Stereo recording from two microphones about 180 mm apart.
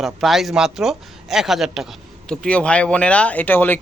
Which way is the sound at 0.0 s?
Centre (ahead or behind).